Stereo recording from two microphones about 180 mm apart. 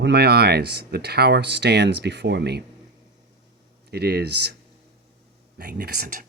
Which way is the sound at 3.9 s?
60° right (ahead or behind).